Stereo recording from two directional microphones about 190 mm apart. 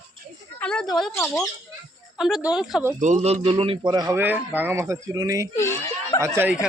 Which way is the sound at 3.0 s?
40° right (ahead or behind).